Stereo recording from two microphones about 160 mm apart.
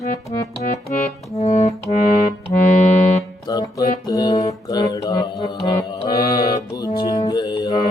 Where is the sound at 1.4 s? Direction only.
40° left (ahead or behind).